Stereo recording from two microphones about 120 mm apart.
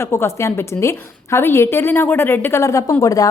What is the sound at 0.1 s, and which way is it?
A woman's voice, 20° left (ahead or behind).